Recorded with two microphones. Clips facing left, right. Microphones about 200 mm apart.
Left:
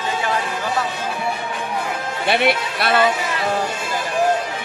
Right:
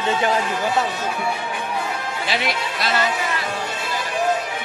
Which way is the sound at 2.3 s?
60° left (ahead or behind).